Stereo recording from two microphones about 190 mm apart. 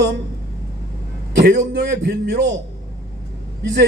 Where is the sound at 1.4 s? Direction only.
55° right (ahead or behind).